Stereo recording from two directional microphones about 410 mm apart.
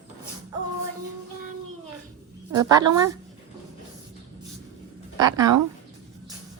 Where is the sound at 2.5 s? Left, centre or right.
Centre.